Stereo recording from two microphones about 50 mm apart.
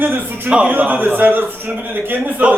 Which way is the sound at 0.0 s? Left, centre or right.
Right.